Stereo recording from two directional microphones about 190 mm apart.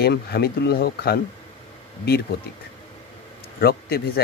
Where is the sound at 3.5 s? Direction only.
55° left (ahead or behind).